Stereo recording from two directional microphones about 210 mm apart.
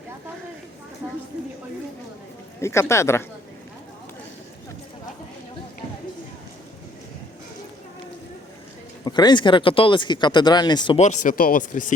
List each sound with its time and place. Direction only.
2.6 s speech: 15° left (ahead or behind)
9.0 s speech: 20° left (ahead or behind)
11.0 s speech: 35° left (ahead or behind)